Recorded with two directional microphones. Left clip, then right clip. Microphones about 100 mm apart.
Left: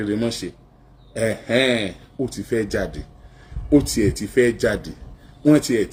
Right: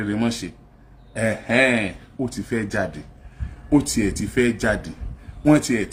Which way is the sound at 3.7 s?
55° right (ahead or behind).